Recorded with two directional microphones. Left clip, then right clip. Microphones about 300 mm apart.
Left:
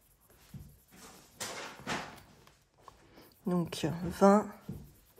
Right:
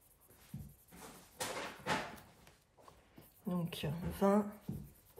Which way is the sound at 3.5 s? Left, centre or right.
Centre.